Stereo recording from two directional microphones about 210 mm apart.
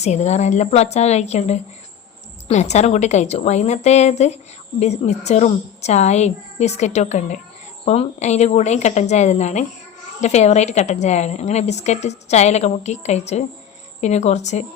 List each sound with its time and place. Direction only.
0.0 s a woman's voice: 30° left (ahead or behind)